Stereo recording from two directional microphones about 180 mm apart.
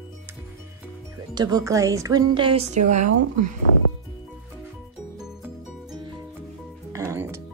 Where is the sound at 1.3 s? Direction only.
20° right (ahead or behind).